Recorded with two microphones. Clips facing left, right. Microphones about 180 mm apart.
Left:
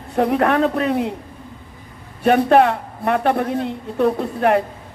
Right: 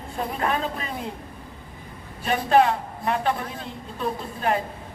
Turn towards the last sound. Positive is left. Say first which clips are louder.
# left 8 dB
turn(degrees=65)  # may be behind; listen again after turning